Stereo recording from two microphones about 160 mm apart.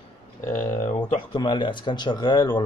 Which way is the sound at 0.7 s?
50° left (ahead or behind).